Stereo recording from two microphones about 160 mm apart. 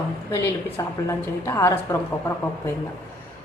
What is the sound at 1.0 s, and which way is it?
Speech, 20° left (ahead or behind).